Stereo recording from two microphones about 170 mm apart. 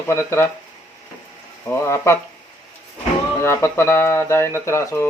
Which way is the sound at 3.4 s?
15° left (ahead or behind).